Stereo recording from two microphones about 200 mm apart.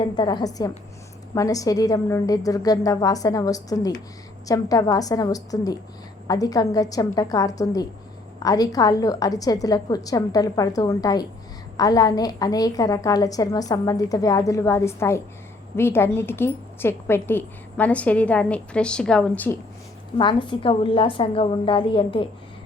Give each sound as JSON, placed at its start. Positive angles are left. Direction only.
{"t": 0.0, "sound": "a woman's voice", "side_deg": 20}
{"t": 20.1, "sound": "a woman's voice", "side_deg": 25}